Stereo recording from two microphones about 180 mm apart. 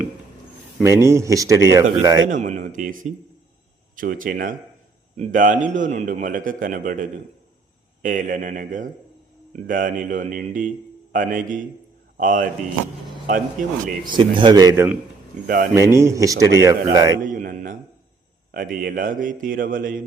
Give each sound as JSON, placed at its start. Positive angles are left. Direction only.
{"t": 0.8, "sound": "a man's voice", "side_deg": -15}
{"t": 2.3, "sound": "a man's voice", "side_deg": -45}
{"t": 14.2, "sound": "a man's voice", "side_deg": -25}
{"t": 15.4, "sound": "a man's voice", "side_deg": -50}
{"t": 15.7, "sound": "speech", "side_deg": -15}
{"t": 17.2, "sound": "a man's voice", "side_deg": -50}